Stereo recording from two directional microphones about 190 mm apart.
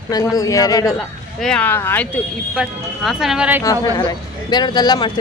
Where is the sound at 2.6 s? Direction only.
Centre (ahead or behind).